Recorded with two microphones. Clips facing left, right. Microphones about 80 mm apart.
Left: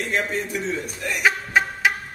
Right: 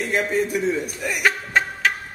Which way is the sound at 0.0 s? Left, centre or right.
Centre.